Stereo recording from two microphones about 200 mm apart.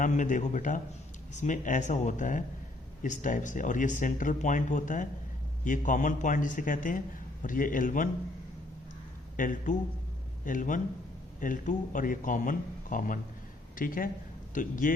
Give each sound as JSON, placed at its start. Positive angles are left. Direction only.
{"t": 0.0, "sound": "a man's voice", "side_deg": 40}
{"t": 9.3, "sound": "a man's voice", "side_deg": 40}